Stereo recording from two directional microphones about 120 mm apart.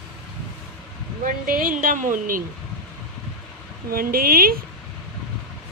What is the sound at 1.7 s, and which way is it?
Speech, 90° right.